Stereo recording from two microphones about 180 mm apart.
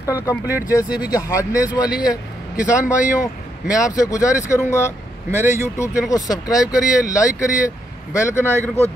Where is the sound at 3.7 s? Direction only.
20° left (ahead or behind).